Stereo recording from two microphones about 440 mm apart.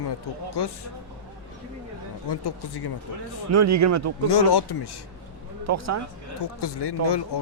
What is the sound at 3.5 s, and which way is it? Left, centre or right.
Speech, right.